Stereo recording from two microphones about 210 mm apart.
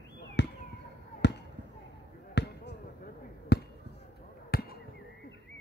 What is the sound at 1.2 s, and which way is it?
Basketball bounce, 55° left (ahead or behind).